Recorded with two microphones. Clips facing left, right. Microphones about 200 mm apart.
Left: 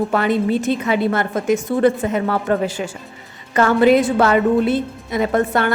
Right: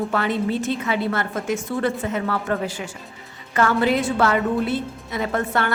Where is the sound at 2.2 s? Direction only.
30° left (ahead or behind).